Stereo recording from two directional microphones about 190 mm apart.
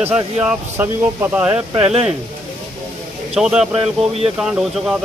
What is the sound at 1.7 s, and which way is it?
Speech, 30° right (ahead or behind).